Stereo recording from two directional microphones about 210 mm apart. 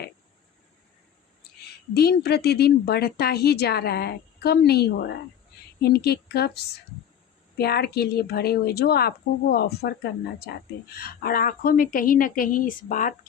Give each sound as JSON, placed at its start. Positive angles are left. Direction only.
{"t": 1.9, "sound": "a woman's voice", "side_deg": 50}